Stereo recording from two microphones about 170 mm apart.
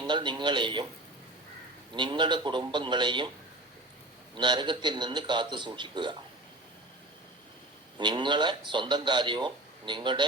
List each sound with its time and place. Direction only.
0.1 s speech: 25° right (ahead or behind)
2.0 s speech: 25° right (ahead or behind)
4.4 s speech: 25° right (ahead or behind)
7.9 s speech: 25° right (ahead or behind)